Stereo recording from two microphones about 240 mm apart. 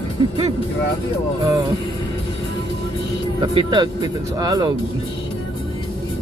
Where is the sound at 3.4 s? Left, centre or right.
Centre.